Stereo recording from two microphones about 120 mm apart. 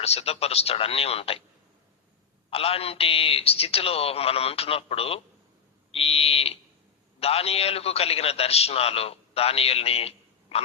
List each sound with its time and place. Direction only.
0.0 s a man's voice: 60° left (ahead or behind)
2.5 s a man's voice: 55° left (ahead or behind)